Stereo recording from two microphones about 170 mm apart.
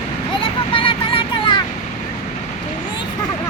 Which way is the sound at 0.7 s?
30° left (ahead or behind).